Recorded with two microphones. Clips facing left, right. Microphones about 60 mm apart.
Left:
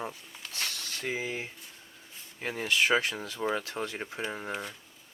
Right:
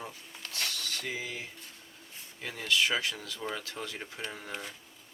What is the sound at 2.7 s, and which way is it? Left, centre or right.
Speech, left.